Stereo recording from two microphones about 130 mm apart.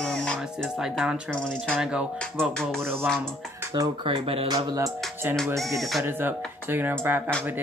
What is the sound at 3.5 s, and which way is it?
Speech, 25° right (ahead or behind).